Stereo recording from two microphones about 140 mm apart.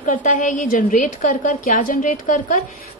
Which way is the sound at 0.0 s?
70° left (ahead or behind).